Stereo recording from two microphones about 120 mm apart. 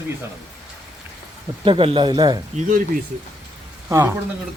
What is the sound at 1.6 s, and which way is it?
Speech, 45° right (ahead or behind).